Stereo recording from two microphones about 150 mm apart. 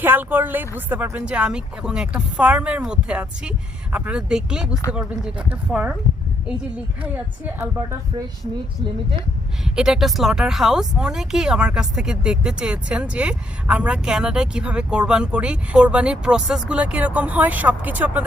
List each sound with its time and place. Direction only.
0.0 s speech: 15° right (ahead or behind)
7.6 s speech: 15° right (ahead or behind)
9.6 s speech: 5° right (ahead or behind)